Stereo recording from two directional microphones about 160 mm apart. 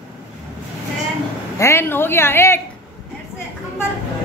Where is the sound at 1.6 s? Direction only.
15° left (ahead or behind).